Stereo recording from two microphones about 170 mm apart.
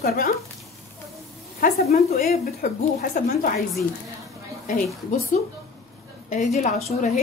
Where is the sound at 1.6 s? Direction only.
65° left (ahead or behind).